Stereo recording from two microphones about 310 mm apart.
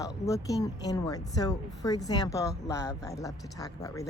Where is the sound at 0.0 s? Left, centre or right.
Centre.